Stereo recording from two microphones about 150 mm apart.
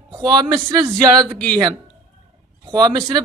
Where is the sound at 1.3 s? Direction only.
10° left (ahead or behind).